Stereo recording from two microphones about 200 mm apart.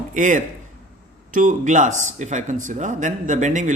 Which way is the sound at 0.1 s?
40° right (ahead or behind).